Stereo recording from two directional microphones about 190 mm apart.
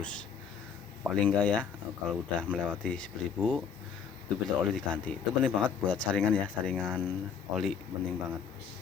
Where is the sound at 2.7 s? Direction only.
5° left (ahead or behind).